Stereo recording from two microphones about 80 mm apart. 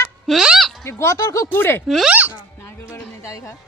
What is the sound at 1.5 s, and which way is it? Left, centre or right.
Speech, left.